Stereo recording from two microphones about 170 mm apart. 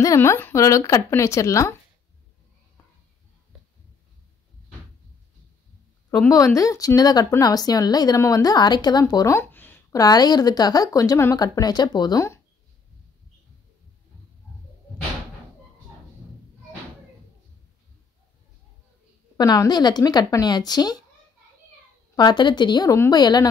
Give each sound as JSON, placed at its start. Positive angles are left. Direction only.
{"t": 0.0, "sound": "speech", "side_deg": 15}
{"t": 6.3, "sound": "speech", "side_deg": 20}
{"t": 10.0, "sound": "speech", "side_deg": 25}
{"t": 19.3, "sound": "speech", "side_deg": 20}
{"t": 22.1, "sound": "speech", "side_deg": 25}